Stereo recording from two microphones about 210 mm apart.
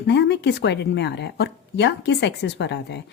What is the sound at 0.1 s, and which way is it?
A woman's voice, 55° left (ahead or behind).